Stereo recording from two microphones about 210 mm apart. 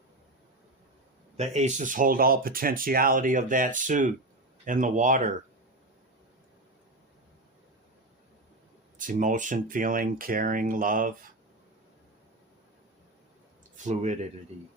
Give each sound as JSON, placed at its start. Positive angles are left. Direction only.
{"t": 1.4, "sound": "speech", "side_deg": -35}
{"t": 9.0, "sound": "speech", "side_deg": -40}
{"t": 13.8, "sound": "speech", "side_deg": -35}